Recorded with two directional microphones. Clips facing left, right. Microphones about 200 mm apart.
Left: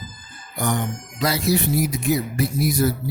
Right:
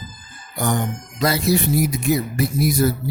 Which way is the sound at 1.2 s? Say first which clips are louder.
Right 2 dB; 50° right (ahead or behind).